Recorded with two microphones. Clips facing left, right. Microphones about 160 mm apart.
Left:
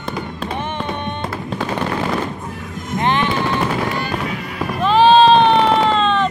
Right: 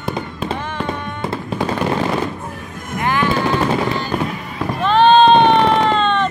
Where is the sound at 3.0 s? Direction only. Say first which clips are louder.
Left 1 dB; 20° left (ahead or behind).